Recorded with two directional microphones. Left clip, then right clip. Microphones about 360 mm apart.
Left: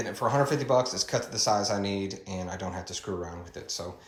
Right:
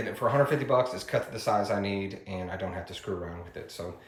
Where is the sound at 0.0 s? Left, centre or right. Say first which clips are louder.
Right 1 dB; centre.